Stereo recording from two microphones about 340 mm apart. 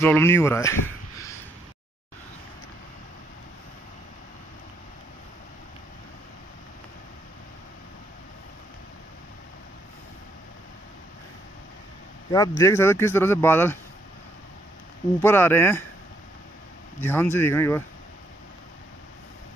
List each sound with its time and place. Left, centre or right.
0.0 s speech: centre
12.3 s speech: centre
15.2 s speech: centre
17.0 s speech: centre